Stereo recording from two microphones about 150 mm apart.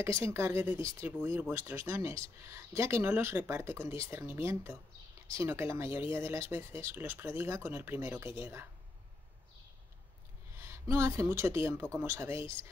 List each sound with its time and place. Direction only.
0.0 s speech: 15° right (ahead or behind)
10.6 s speech: 20° right (ahead or behind)